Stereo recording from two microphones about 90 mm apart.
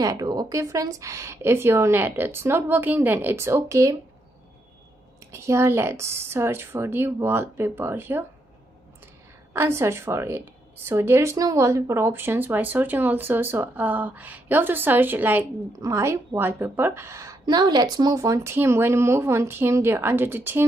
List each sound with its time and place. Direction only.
0.0 s speech: 45° right (ahead or behind)
5.3 s speech: 30° right (ahead or behind)
9.5 s speech: 25° right (ahead or behind)
15.7 s a woman's voice: 35° right (ahead or behind)
17.5 s speech: 50° right (ahead or behind); by 20.6 s 25° right (ahead or behind)